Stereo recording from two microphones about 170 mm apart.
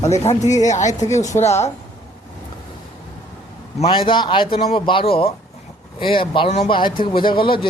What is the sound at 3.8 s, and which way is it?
A man's voice, 30° left (ahead or behind).